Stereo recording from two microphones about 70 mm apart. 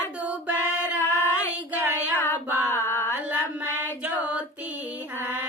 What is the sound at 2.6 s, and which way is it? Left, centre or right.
Mantra, left.